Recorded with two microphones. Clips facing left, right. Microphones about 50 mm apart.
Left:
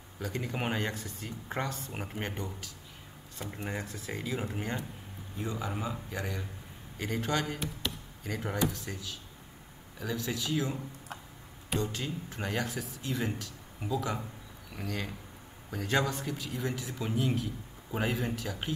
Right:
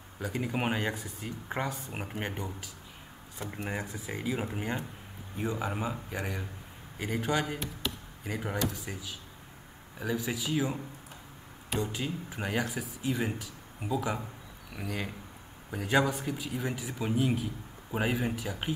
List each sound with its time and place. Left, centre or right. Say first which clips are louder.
0.2 s speech: right 3 dB; centre
7.5 s speech: even; centre
8.2 s speech: left 1 dB; centre
11.8 s speech: right 1 dB; centre